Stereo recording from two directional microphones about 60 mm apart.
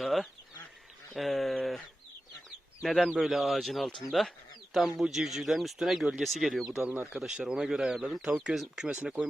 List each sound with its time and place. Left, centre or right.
0.0 s goose: centre
1.1 s bird: centre
2.8 s speech: centre